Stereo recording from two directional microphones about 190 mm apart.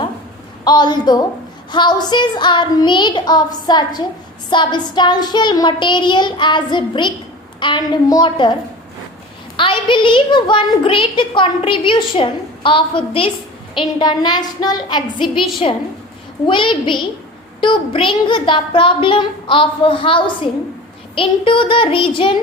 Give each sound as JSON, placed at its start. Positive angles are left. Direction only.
{"t": 0.6, "sound": "a woman's voice", "side_deg": 25}
{"t": 9.6, "sound": "a woman's voice", "side_deg": 25}